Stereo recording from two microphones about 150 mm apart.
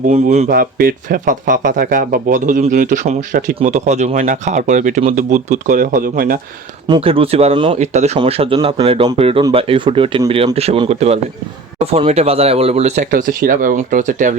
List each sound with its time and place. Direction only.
0.5 s speech: 80° right
3.6 s speech: 50° right (ahead or behind); by 6.4 s 80° right
6.8 s speech: 35° right (ahead or behind)
7.8 s speech: 50° right (ahead or behind)
13.1 s speech: 65° right (ahead or behind)